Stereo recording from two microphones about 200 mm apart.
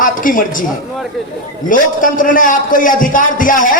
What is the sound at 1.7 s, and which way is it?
A man's voice, 40° left (ahead or behind).